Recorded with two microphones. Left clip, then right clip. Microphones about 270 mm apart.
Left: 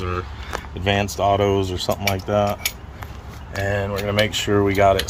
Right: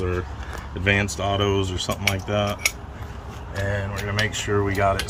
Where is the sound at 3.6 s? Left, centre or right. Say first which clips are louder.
Left 5 dB; centre.